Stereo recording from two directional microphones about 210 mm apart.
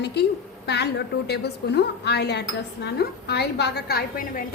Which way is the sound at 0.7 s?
50° left (ahead or behind).